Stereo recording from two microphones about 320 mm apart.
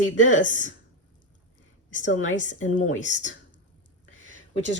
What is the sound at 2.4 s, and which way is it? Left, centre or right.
Speech, left.